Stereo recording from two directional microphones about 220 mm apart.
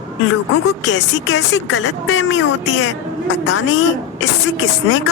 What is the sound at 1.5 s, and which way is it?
Speech, 60° left (ahead or behind).